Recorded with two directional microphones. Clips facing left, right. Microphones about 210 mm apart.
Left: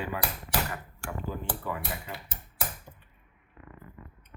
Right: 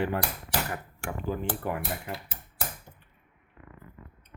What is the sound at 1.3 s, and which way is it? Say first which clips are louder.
Speech: right 5 dB; 65° right (ahead or behind).